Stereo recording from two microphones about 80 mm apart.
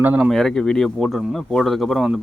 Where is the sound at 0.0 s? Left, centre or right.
Right.